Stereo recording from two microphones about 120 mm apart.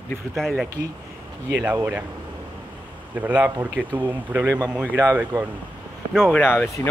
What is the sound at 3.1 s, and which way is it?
Speech, 10° right (ahead or behind).